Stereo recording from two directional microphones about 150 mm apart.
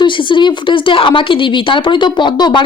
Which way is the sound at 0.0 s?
30° left (ahead or behind).